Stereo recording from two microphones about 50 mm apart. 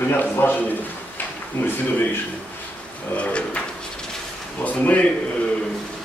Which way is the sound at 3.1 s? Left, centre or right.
Left.